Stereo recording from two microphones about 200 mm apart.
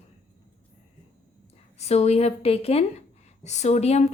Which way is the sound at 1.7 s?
30° left (ahead or behind).